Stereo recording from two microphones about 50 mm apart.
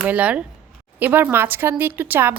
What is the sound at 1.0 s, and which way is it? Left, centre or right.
A woman's voice, right.